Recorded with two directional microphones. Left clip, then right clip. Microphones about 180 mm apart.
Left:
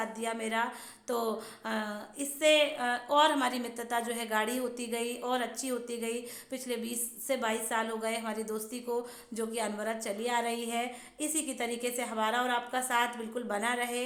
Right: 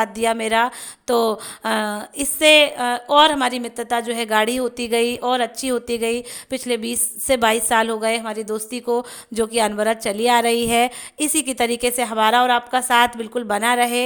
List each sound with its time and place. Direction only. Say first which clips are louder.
0.0 s speech: right 15 dB; 55° right (ahead or behind)